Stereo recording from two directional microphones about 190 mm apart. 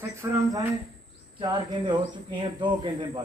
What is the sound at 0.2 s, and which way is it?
A man's voice, 20° right (ahead or behind).